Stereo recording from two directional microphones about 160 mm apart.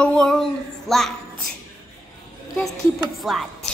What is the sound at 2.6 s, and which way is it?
Speech, centre (ahead or behind).